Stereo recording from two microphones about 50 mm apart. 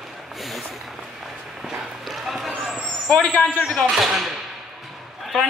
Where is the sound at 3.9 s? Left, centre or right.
Centre.